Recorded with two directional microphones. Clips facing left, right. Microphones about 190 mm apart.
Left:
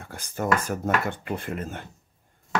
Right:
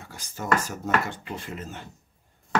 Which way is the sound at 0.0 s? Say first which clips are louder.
Left 6 dB; 55° left (ahead or behind).